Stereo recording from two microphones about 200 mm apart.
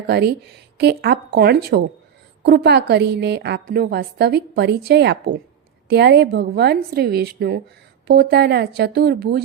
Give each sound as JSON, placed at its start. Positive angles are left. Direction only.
{"t": 0.1, "sound": "a woman's voice", "side_deg": -55}